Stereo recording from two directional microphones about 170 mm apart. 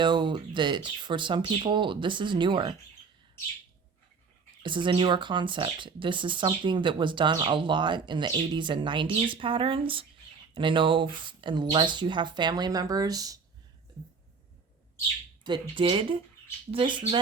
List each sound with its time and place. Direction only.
0.0 s speech: 25° right (ahead or behind)
4.6 s speech: 30° right (ahead or behind)
15.7 s speech: 30° right (ahead or behind)